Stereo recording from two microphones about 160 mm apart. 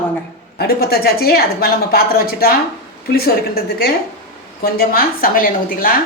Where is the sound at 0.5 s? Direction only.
75° left (ahead or behind).